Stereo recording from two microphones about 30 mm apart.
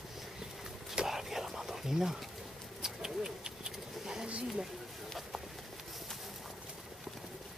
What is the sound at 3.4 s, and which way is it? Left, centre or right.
Vehicle, right.